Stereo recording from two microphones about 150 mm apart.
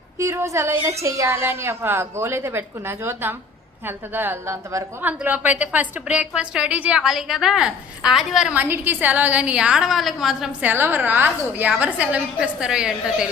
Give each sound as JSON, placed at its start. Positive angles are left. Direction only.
{"t": 0.2, "sound": "a woman's voice", "side_deg": -20}